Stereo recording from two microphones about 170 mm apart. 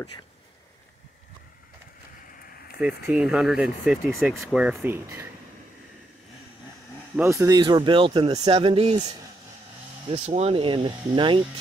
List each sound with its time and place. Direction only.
3.1 s speech: 5° right (ahead or behind)
7.2 s speech: 15° right (ahead or behind); by 9.0 s 35° right (ahead or behind)
10.0 s speech: 35° right (ahead or behind)